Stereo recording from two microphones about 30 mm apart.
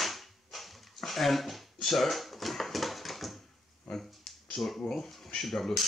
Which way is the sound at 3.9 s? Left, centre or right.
Centre.